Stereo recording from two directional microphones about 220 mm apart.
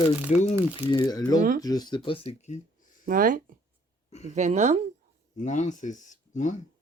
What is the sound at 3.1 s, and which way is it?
Speech, 40° right (ahead or behind).